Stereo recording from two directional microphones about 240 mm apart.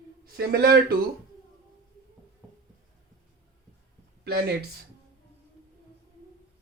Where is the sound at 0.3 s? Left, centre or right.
Right.